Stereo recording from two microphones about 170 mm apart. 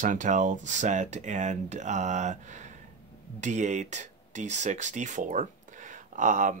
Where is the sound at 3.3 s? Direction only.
45° right (ahead or behind).